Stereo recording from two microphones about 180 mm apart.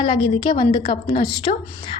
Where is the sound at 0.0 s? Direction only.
30° left (ahead or behind).